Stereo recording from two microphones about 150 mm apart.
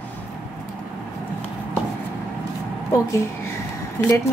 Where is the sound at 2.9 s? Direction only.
20° left (ahead or behind).